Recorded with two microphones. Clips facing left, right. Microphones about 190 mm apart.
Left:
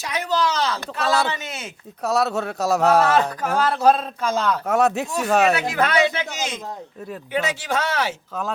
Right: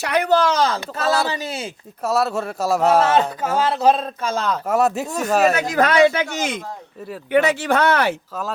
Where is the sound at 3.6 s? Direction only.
20° right (ahead or behind).